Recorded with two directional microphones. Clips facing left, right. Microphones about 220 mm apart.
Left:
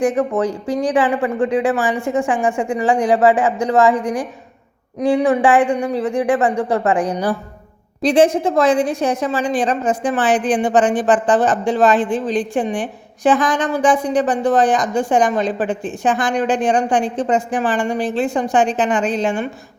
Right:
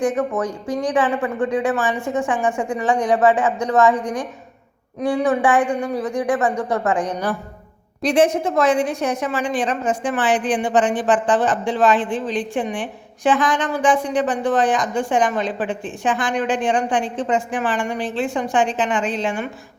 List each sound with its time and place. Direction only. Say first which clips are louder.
0.0 s speech: left 3 dB; 30° left (ahead or behind)
4.0 s a woman's voice: left 3 dB; 10° left (ahead or behind)
4.9 s a woman's voice: left 4 dB; 30° left (ahead or behind)